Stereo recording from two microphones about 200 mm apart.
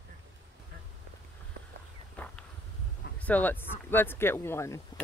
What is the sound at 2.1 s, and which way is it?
Walk, 5° left (ahead or behind).